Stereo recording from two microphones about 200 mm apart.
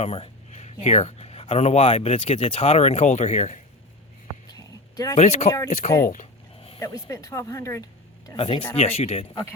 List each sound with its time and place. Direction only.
0.0 s speech: 30° left (ahead or behind)
4.5 s a sound: 20° left (ahead or behind)
5.1 s speech: 35° left (ahead or behind)
6.7 s speech: 15° left (ahead or behind)
8.4 s speech: 25° left (ahead or behind)
9.3 s speech: 15° left (ahead or behind)